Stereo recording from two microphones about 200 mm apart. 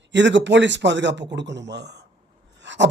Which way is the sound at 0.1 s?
65° right (ahead or behind).